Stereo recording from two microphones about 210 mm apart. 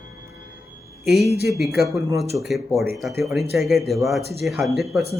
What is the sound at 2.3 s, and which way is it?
Speech, centre (ahead or behind).